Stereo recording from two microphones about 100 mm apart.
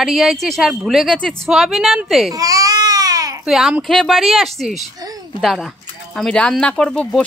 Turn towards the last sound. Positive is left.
turn(degrees=10)  # may be behind; listen again after turning